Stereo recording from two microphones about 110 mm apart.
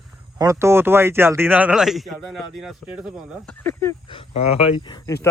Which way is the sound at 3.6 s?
25° left (ahead or behind).